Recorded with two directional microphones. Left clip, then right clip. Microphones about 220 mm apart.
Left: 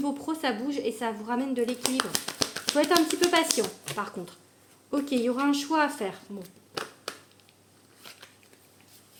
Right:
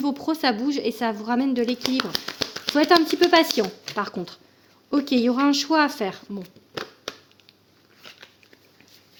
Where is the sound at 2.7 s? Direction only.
45° right (ahead or behind).